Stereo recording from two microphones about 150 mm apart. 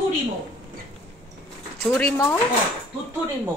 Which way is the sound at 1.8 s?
15° left (ahead or behind).